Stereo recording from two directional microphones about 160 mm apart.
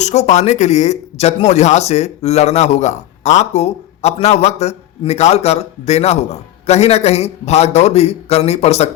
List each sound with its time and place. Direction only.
0.0 s speech: 45° left (ahead or behind)